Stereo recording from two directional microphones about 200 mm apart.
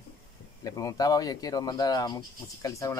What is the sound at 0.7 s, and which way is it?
Speech, 15° left (ahead or behind).